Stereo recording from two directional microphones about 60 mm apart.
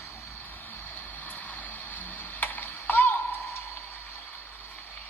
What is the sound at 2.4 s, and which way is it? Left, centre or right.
Music, left.